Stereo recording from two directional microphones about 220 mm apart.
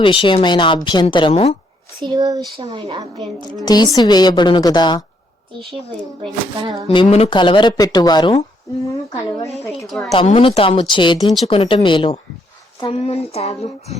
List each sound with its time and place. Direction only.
0.0 s speech: 20° left (ahead or behind)
2.0 s speech: 20° right (ahead or behind)
3.3 s speech: 15° left (ahead or behind)
6.8 s speech: 25° left (ahead or behind)
9.8 s a woman's voice: centre (ahead or behind)
10.2 s speech: 25° left (ahead or behind)